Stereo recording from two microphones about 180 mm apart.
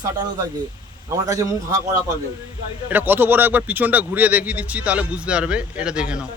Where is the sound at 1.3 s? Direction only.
20° right (ahead or behind).